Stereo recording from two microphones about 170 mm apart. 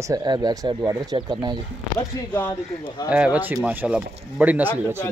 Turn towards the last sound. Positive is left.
turn(degrees=-10)  # may be behind; listen again after turning